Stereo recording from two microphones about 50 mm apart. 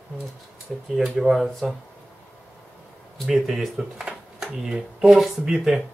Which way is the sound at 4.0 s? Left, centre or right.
Centre.